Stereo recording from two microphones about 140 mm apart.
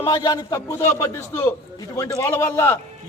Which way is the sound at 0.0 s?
25° left (ahead or behind).